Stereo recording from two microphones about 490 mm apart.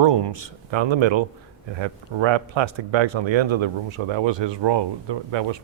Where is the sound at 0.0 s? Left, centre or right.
Right.